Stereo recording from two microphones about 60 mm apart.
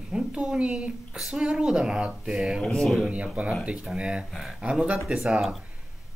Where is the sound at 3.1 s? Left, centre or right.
Right.